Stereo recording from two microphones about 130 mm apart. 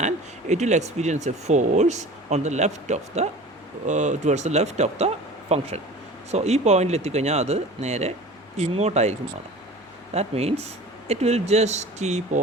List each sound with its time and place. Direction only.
0.0 s speech: 65° right (ahead or behind)
10.2 s speech: 55° right (ahead or behind)